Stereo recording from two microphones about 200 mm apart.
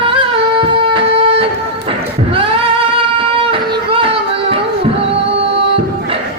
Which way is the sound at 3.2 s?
25° right (ahead or behind).